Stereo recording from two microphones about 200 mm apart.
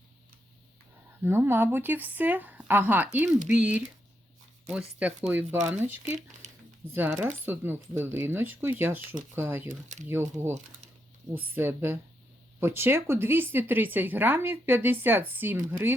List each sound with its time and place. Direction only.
1.2 s speech: 10° right (ahead or behind)
4.7 s speech: 5° right (ahead or behind)
6.1 s speech: 40° right (ahead or behind)
6.9 s speech: 10° right (ahead or behind)
9.6 s speech: 35° right (ahead or behind)
10.1 s speech: 10° right (ahead or behind)